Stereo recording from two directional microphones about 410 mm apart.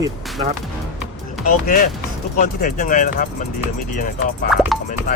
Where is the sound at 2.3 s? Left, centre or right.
Centre.